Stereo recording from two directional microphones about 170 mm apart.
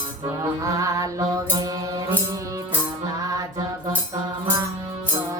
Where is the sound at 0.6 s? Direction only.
20° right (ahead or behind).